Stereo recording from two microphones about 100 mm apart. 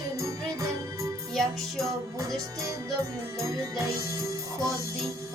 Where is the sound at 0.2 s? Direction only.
30° right (ahead or behind).